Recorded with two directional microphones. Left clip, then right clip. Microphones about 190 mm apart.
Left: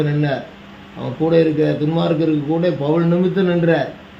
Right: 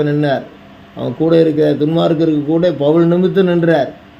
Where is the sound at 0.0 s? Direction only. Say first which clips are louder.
Right 5 dB; 55° right (ahead or behind).